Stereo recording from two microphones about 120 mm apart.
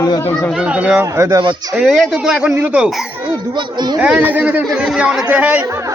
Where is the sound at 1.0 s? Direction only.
25° right (ahead or behind).